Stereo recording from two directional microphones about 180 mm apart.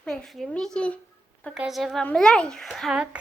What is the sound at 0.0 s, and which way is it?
A child's voice, 5° left (ahead or behind).